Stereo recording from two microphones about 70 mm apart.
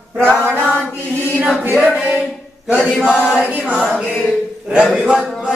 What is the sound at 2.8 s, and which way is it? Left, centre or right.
A capella, centre.